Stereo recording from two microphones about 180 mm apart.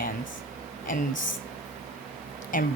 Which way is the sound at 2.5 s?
50° left (ahead or behind).